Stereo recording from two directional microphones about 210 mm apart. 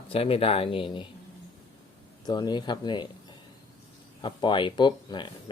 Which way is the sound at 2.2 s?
20° left (ahead or behind).